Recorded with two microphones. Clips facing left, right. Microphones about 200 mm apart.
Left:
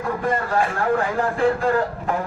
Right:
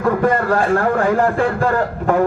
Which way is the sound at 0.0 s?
70° right (ahead or behind).